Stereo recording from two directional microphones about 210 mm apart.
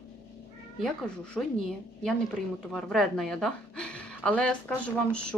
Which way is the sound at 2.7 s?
Centre (ahead or behind).